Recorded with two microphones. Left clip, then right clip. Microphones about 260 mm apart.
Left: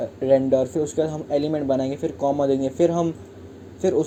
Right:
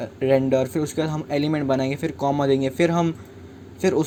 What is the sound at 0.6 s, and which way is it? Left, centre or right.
Speech, right.